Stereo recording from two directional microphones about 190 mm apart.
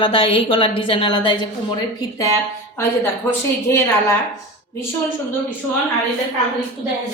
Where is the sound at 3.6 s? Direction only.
15° left (ahead or behind).